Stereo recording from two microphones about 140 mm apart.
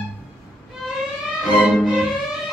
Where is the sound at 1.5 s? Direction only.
Centre (ahead or behind).